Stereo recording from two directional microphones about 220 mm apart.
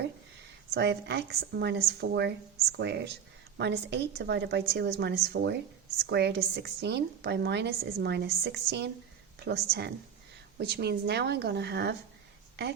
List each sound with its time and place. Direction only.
0.7 s a woman's voice: 50° right (ahead or behind)